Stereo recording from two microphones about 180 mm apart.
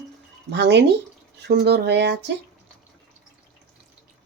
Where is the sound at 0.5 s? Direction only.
70° right (ahead or behind).